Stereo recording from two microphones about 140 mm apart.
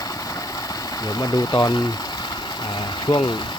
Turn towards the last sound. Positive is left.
turn(degrees=30)  # may be behind; listen again after turning